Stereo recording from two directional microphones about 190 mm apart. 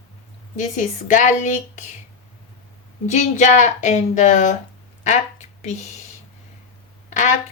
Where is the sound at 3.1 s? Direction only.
40° left (ahead or behind).